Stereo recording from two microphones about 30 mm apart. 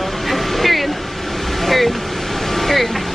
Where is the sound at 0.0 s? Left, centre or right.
Centre.